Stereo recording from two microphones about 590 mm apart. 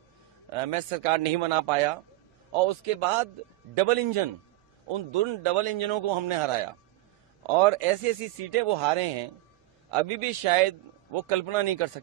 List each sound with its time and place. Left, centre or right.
0.5 s a man's voice: right